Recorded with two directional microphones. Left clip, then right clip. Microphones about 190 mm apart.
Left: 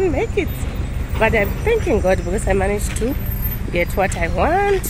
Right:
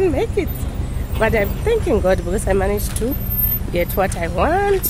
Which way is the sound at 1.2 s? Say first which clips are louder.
Left 1 dB; 5° right (ahead or behind).